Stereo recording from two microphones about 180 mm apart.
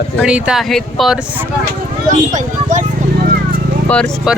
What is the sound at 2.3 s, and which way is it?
Speech, 45° right (ahead or behind).